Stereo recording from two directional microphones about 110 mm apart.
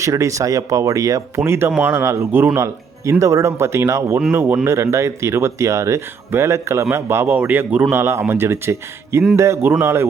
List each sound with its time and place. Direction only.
0.0 s speech: 30° right (ahead or behind)